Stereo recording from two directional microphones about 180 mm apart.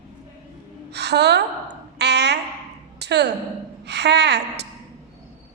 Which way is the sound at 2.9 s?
70° right (ahead or behind).